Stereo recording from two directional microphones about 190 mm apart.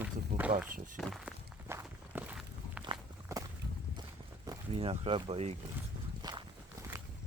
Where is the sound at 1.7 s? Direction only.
10° right (ahead or behind).